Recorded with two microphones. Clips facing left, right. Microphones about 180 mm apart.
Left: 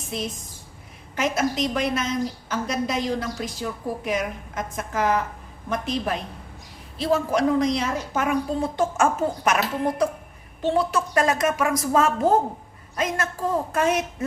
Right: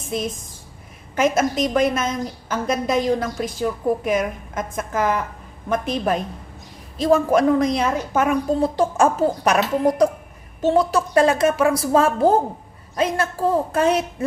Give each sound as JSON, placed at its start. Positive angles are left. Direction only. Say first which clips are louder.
{"t": 1.1, "sound": "a woman's voice", "louder": "right 5 dB", "side_deg": -50}
{"t": 8.6, "sound": "a woman's voice", "louder": "right 5 dB", "side_deg": -35}
{"t": 11.1, "sound": "a woman's voice", "louder": "right 6 dB", "side_deg": -30}